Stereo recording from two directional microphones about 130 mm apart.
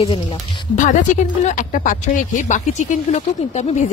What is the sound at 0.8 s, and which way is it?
Speech, 75° left (ahead or behind).